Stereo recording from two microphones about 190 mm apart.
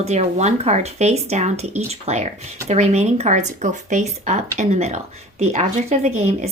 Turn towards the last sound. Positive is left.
turn(degrees=-35)  # may be behind; listen again after turning